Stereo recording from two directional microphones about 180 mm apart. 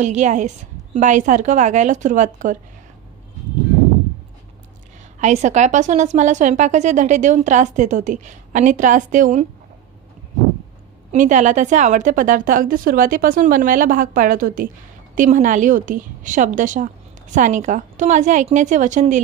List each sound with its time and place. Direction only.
0.0 s a woman's voice: 40° right (ahead or behind)
5.2 s a woman's voice: 40° right (ahead or behind)
11.1 s a woman's voice: 45° right (ahead or behind)